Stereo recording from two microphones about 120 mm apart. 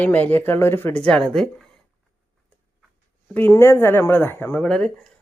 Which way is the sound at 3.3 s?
15° left (ahead or behind).